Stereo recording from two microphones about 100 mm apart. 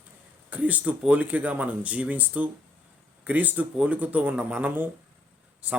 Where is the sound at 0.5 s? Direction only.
15° right (ahead or behind).